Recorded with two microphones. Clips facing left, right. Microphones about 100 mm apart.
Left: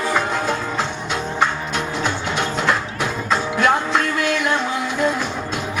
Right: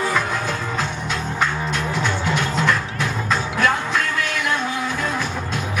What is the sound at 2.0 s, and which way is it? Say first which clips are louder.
Music: even; 20° left (ahead or behind).